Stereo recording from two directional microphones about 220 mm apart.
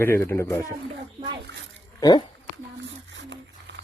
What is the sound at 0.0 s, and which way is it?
Speech, 10° left (ahead or behind).